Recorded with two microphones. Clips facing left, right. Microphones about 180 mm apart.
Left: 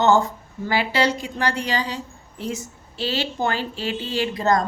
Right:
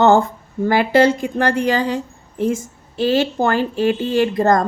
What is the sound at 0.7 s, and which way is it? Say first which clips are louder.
Speech: right 7 dB; 50° right (ahead or behind).